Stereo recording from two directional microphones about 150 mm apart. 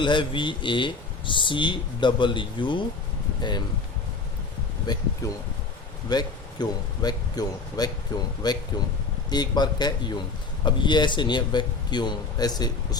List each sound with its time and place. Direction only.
0.0 s speech: 35° left (ahead or behind)
4.9 s a man's voice: 25° left (ahead or behind)
6.1 s a man's voice: 25° left (ahead or behind)